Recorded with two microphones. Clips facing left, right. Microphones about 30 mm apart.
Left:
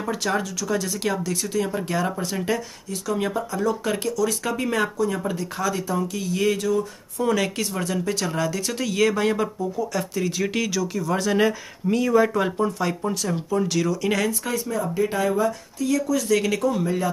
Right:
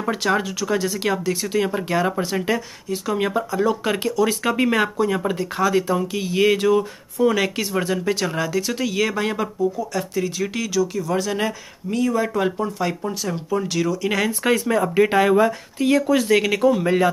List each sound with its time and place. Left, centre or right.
0.0 s speech: right
7.2 s speech: centre
14.4 s speech: right
15.2 s speech: right
16.3 s speech: right
16.8 s speech: right